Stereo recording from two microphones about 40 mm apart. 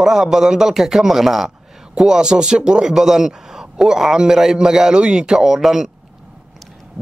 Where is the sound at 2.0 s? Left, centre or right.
Centre.